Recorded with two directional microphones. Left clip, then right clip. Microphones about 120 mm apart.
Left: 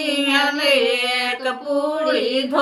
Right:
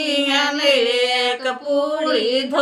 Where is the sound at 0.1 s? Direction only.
15° right (ahead or behind).